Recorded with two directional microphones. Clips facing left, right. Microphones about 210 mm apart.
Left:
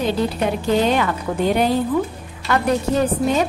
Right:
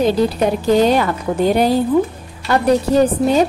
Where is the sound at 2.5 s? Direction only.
35° right (ahead or behind).